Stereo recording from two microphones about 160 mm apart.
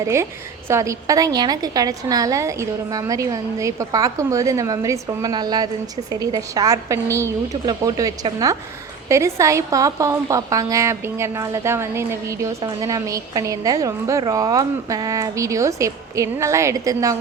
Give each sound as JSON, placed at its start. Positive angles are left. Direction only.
{"t": 0.0, "sound": "a woman's voice", "side_deg": -15}